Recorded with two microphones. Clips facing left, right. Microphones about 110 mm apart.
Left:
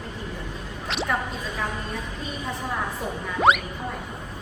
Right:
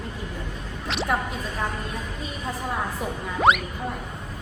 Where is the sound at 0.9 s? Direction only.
Centre (ahead or behind).